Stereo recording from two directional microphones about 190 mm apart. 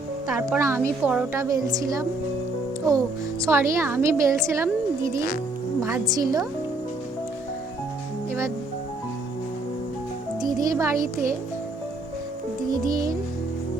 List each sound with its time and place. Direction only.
0.5 s a woman's voice: 15° right (ahead or behind)
3.4 s a woman's voice: 15° right (ahead or behind)
10.4 s a woman's voice: 20° right (ahead or behind)
12.6 s a child's voice: 20° right (ahead or behind)